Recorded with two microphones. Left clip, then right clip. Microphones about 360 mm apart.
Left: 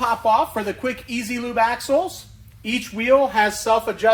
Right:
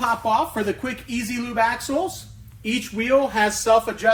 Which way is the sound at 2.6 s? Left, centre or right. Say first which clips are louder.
Left 2 dB; left.